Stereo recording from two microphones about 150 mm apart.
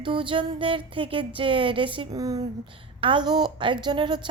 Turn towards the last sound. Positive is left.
turn(degrees=-30)  # may be behind; listen again after turning